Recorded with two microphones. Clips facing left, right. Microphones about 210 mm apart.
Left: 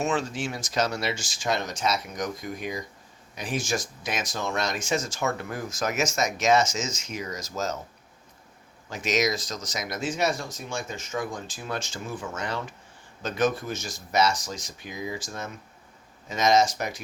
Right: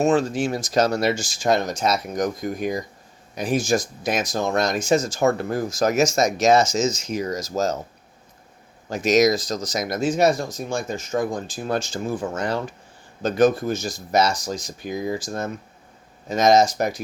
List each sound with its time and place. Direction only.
0.0 s speech: 40° right (ahead or behind)
8.9 s speech: 40° right (ahead or behind)